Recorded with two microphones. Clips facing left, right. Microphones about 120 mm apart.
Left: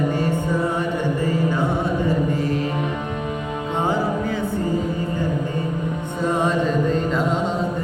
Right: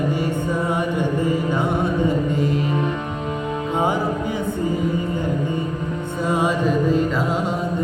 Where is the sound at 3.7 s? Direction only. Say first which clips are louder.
Even; 15° right (ahead or behind).